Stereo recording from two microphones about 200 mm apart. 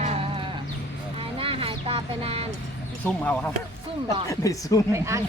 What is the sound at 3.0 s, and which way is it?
Speech, 5° left (ahead or behind).